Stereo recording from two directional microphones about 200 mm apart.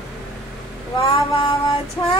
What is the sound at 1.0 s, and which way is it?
Child singing, 25° left (ahead or behind).